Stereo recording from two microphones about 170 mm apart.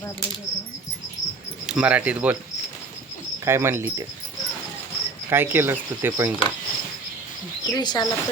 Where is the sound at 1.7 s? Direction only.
5° right (ahead or behind).